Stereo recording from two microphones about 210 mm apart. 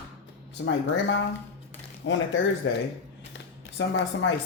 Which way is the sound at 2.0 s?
60° left (ahead or behind).